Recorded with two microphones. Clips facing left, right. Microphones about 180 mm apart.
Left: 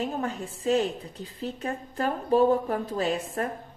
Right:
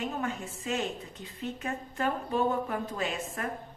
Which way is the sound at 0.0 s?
35° left (ahead or behind).